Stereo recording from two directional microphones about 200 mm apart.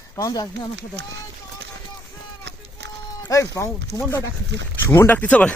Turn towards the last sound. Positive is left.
turn(degrees=5)  # may be behind; listen again after turning